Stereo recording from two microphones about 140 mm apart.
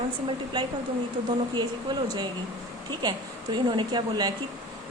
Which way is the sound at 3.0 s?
25° right (ahead or behind).